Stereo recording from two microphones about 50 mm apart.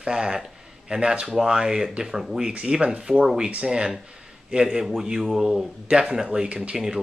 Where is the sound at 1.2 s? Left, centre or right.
Centre.